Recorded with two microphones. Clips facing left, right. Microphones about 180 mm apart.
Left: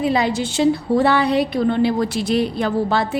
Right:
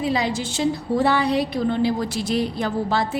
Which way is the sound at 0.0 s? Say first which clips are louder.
Left 4 dB; 60° left (ahead or behind).